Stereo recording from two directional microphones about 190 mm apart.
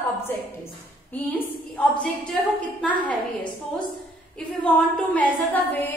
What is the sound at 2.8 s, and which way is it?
A woman's voice, 5° left (ahead or behind).